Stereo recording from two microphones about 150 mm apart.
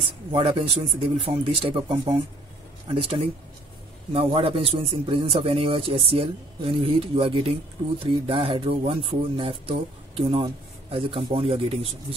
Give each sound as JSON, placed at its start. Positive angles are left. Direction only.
{"t": 0.3, "sound": "speech", "side_deg": -40}